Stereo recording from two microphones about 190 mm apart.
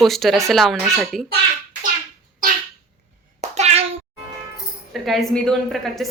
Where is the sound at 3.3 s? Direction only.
35° right (ahead or behind).